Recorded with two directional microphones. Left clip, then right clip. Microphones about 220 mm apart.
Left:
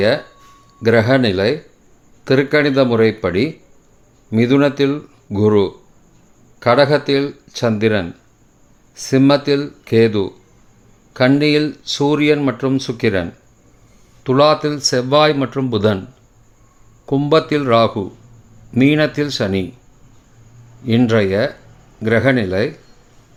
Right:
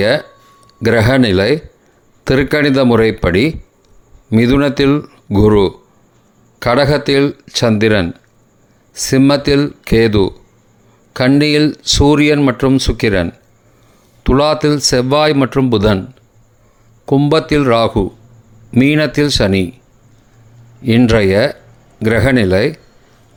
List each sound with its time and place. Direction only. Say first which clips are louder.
0.8 s speech: right 2 dB; 30° right (ahead or behind)
14.3 s speech: right 1 dB; 25° right (ahead or behind)
17.1 s speech: right 2 dB; 25° right (ahead or behind)
20.8 s speech: right 4 dB; 25° right (ahead or behind)